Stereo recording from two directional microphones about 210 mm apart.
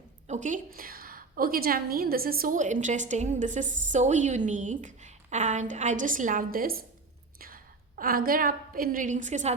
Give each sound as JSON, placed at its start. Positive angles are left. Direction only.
{"t": 0.3, "sound": "a woman's voice", "side_deg": -35}